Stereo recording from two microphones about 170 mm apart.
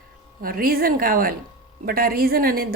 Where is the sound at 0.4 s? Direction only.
60° right (ahead or behind).